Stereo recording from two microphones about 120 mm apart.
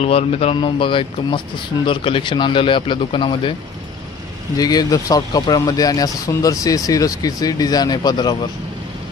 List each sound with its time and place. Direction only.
0.0 s speech: 55° left (ahead or behind)
4.6 s speech: 30° left (ahead or behind)